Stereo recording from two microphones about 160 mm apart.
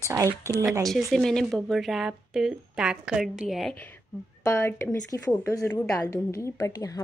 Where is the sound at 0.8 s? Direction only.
Centre (ahead or behind).